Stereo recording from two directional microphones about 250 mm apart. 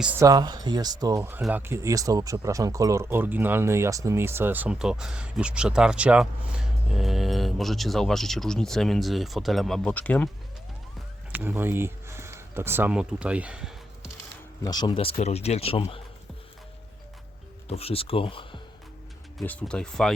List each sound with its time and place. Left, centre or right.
0.0 s speech: centre
11.3 s speech: centre
14.6 s speech: centre
17.7 s speech: left
19.4 s speech: centre